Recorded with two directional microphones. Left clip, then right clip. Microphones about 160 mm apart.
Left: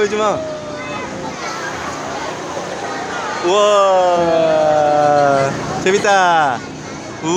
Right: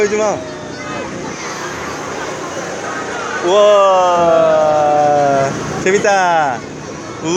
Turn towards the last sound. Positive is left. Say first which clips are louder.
# even
turn(degrees=10)  # may be behind; listen again after turning